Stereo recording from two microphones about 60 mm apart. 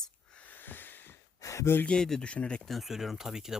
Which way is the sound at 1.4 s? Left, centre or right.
Left.